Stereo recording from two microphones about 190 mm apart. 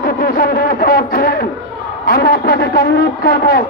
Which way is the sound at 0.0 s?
50° left (ahead or behind).